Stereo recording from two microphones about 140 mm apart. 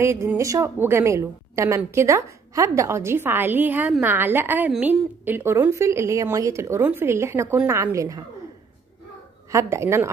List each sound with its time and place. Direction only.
0.0 s a woman's voice: 20° right (ahead or behind)
9.5 s a woman's voice: 20° right (ahead or behind)